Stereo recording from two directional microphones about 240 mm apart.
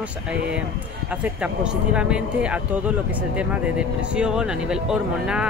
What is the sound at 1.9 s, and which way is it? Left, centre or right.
Speech, centre.